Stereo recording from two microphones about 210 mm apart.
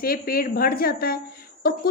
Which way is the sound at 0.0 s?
45° left (ahead or behind).